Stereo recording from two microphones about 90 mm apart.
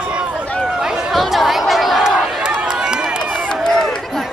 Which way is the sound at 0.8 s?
10° right (ahead or behind).